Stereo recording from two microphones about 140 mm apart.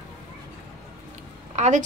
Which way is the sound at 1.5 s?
55° right (ahead or behind).